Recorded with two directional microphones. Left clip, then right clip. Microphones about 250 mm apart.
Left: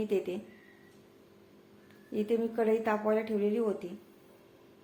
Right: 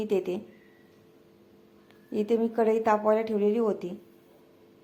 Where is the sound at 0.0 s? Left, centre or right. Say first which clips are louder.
Right 4 dB; centre.